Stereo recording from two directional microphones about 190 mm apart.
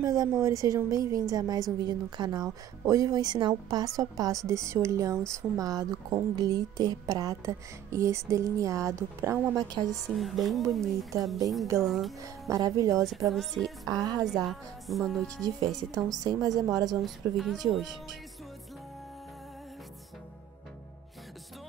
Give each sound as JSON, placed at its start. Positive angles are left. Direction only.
{"t": 0.0, "sound": "a woman's voice", "side_deg": -20}
{"t": 10.0, "sound": "speech", "side_deg": 0}
{"t": 12.2, "sound": "a woman's voice", "side_deg": -20}
{"t": 13.3, "sound": "speech", "side_deg": 0}
{"t": 15.4, "sound": "a woman's voice", "side_deg": -20}
{"t": 17.0, "sound": "speech", "side_deg": 0}